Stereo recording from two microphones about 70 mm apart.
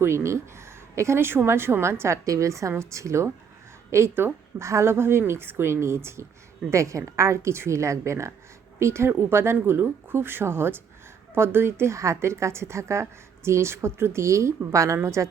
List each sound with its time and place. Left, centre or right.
0.0 s a woman's voice: right